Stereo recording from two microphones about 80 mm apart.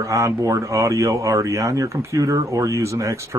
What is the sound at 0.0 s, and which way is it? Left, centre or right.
Speech, right.